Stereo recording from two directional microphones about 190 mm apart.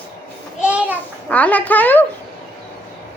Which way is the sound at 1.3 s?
10° left (ahead or behind).